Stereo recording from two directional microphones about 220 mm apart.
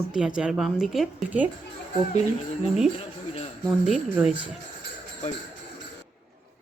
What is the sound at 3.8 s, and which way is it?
Speech, 5° right (ahead or behind).